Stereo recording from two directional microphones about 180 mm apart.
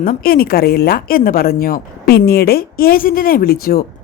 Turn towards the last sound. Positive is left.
turn(degrees=55)  # may be behind; listen again after turning